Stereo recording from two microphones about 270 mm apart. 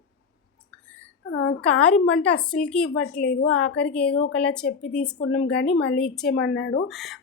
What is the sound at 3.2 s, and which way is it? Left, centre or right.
Speech, left.